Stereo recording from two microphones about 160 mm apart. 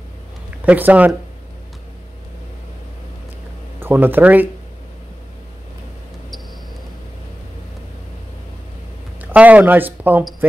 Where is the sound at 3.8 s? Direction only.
10° right (ahead or behind).